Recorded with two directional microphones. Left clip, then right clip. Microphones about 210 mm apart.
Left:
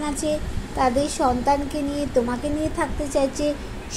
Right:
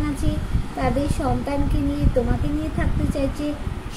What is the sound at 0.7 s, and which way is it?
Speech, 20° left (ahead or behind).